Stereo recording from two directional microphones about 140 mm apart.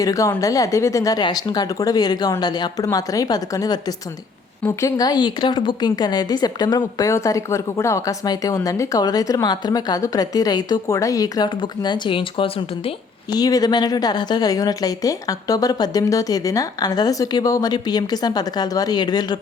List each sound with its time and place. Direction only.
0.0 s a woman's voice: 25° left (ahead or behind); by 12.9 s 40° left (ahead or behind)
13.3 s a woman's voice: 25° left (ahead or behind)